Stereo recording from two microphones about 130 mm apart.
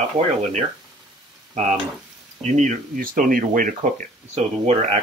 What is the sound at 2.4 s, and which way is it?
Speech, 70° right (ahead or behind).